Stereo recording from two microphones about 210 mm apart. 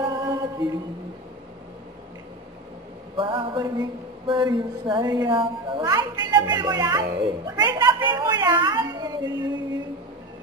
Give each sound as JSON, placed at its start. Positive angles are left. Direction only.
{"t": 0.1, "sound": "chant", "side_deg": -20}
{"t": 3.2, "sound": "a woman's voice", "side_deg": -25}